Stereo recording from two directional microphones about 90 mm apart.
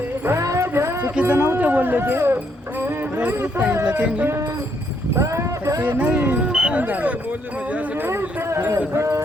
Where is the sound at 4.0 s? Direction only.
15° right (ahead or behind).